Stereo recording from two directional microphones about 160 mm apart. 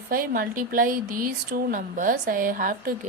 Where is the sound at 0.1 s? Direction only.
60° right (ahead or behind).